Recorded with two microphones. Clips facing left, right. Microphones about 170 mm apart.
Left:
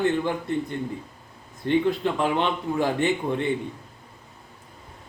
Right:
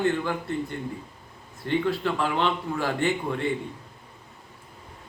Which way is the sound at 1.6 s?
20° left (ahead or behind).